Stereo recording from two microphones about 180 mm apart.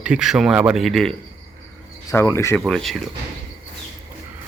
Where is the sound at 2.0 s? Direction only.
15° left (ahead or behind).